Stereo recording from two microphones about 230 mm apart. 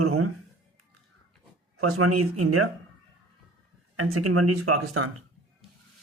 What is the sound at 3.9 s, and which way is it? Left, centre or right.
Speech, right.